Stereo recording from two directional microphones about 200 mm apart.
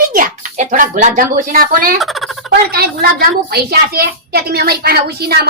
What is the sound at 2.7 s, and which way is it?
A woman's voice, 50° right (ahead or behind).